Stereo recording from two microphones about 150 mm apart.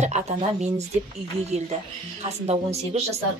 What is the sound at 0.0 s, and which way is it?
Speech, 50° right (ahead or behind).